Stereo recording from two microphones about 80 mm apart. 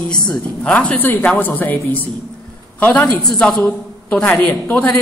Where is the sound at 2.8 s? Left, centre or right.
Centre.